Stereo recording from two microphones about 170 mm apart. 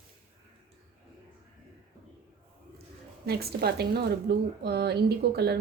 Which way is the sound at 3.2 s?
70° right (ahead or behind).